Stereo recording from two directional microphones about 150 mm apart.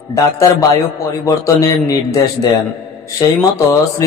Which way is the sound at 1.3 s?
20° left (ahead or behind).